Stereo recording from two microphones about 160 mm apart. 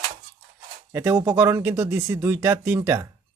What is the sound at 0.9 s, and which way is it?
Speech, 15° right (ahead or behind).